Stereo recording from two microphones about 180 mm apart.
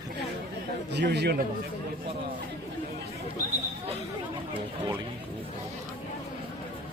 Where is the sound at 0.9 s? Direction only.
70° right (ahead or behind).